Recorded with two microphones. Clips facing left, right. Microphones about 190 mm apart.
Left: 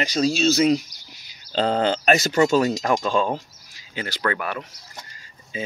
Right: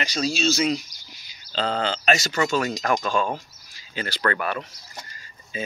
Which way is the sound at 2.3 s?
30° left (ahead or behind).